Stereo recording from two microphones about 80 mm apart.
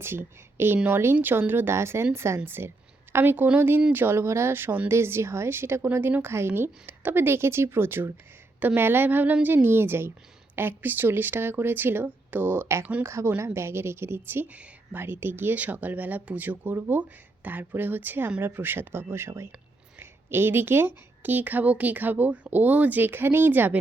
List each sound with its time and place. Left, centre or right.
0.0 s a woman's voice: right